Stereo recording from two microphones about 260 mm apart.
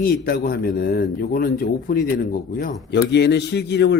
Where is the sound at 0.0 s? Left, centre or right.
Left.